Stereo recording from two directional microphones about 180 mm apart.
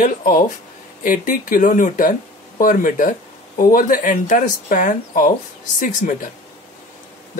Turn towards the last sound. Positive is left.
turn(degrees=45)  # may be behind; listen again after turning